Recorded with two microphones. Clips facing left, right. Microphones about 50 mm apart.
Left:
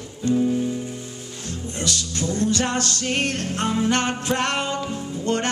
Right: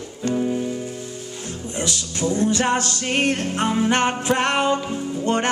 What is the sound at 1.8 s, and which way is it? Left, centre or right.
Music, centre.